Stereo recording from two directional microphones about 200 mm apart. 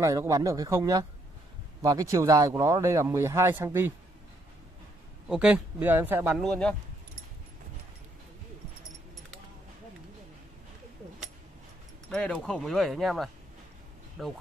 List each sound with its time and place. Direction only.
0.0 s speech: 15° right (ahead or behind)
5.3 s speech: 5° right (ahead or behind)
12.1 s speech: 5° left (ahead or behind)